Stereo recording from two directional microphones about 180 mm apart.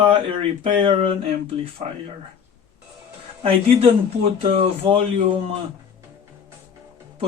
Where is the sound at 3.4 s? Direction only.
30° right (ahead or behind).